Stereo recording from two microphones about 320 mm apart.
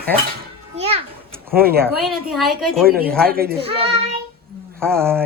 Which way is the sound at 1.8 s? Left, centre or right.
Centre.